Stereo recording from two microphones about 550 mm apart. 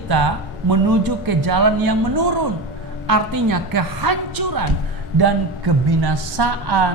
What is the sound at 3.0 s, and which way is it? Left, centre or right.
A woman's voice, right.